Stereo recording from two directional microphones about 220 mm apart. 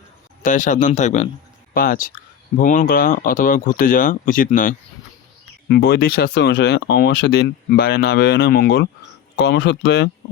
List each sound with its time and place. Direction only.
0.4 s speech: 35° left (ahead or behind); by 10.1 s 50° left (ahead or behind)